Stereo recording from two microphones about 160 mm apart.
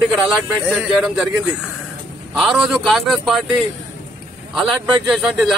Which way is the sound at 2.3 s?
Centre (ahead or behind).